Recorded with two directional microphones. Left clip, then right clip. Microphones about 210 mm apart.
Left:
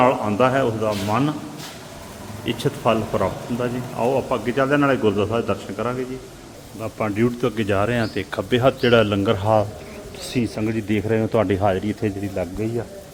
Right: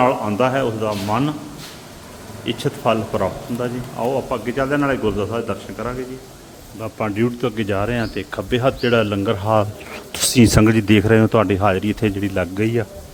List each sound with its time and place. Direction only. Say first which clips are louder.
0.0 s speech: even; 5° right (ahead or behind)
2.4 s speech: right 1 dB; 5° right (ahead or behind)
6.7 s speech: right 1 dB; 5° right (ahead or behind)
10.2 s speech: right 11 dB; 35° right (ahead or behind)
10.7 s speech: right 7 dB; 20° right (ahead or behind)